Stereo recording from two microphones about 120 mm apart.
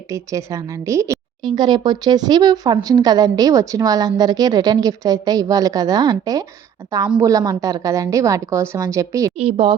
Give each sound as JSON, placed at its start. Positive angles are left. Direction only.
{"t": 0.1, "sound": "a woman's voice", "side_deg": -25}
{"t": 1.4, "sound": "a woman's voice", "side_deg": -40}
{"t": 9.4, "sound": "speech", "side_deg": -55}